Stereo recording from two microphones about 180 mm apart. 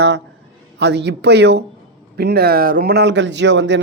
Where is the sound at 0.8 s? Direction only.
70° right (ahead or behind).